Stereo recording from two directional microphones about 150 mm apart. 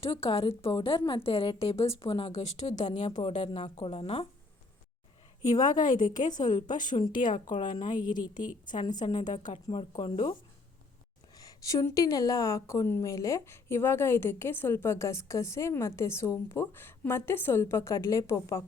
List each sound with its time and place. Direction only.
0.0 s a woman's voice: 40° left (ahead or behind)
5.5 s a woman's voice: 60° left (ahead or behind)
6.3 s a woman's voice: 30° left (ahead or behind)
7.1 s a woman's voice: 65° left (ahead or behind)
9.0 s speech: 45° left (ahead or behind)
9.7 s a woman's voice: 40° left (ahead or behind)
11.3 s a woman's voice: 25° left (ahead or behind)